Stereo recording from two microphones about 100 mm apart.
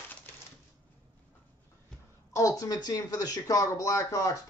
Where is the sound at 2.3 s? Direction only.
30° left (ahead or behind).